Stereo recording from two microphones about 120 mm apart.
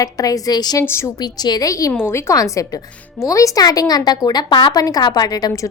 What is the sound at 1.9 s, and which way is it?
Speech, 20° left (ahead or behind).